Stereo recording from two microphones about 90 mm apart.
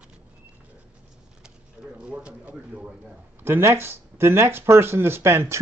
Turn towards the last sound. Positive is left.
turn(degrees=-30)  # may be behind; listen again after turning